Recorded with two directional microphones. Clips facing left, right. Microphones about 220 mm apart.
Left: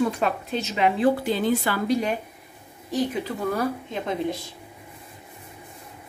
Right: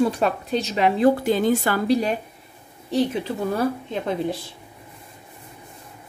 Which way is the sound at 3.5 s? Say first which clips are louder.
Right 3 dB; 35° right (ahead or behind).